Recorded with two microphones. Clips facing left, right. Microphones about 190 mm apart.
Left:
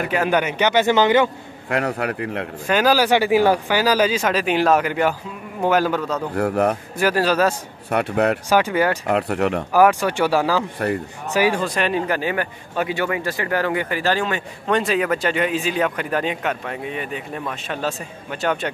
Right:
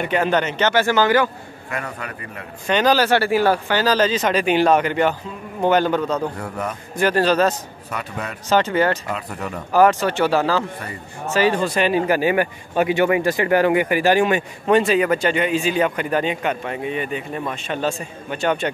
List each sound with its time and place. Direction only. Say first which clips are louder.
0.0 s speech: even; 5° left (ahead or behind); by 1.3 s 20° left (ahead or behind)
1.7 s a man's voice: left 8 dB; 70° left (ahead or behind)
2.6 s speech: even; 5° left (ahead or behind)
6.3 s a man's voice: left 9 dB; 70° left (ahead or behind)
7.0 s speech: right 2 dB; 5° left (ahead or behind)
7.9 s speech: left 11 dB; 65° left (ahead or behind)
8.5 s speech: even; 10° left (ahead or behind)
9.0 s a man's voice: left 8 dB; 65° left (ahead or behind)
9.7 s speech: right 2 dB; 10° left (ahead or behind)
10.8 s speech: left 11 dB; 65° left (ahead or behind)
11.3 s speech: right 1 dB; 10° left (ahead or behind)
11.6 s speech: right 3 dB; centre (ahead or behind)
14.8 s speech: right 1 dB; centre (ahead or behind)